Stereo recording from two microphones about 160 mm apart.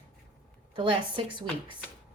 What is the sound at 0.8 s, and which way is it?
Speech, 30° right (ahead or behind).